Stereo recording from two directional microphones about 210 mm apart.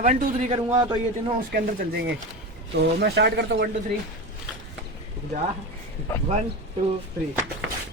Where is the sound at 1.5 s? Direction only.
45° right (ahead or behind).